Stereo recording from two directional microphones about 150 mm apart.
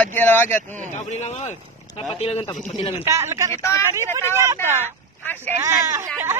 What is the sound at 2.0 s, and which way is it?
Speech, 40° left (ahead or behind).